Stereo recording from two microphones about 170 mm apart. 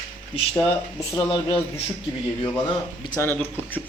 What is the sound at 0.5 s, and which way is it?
Speech, 15° left (ahead or behind).